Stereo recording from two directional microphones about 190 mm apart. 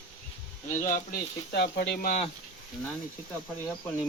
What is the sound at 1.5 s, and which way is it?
Speech, 60° left (ahead or behind).